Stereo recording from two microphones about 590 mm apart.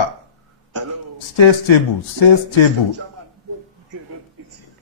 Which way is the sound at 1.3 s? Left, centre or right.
Left.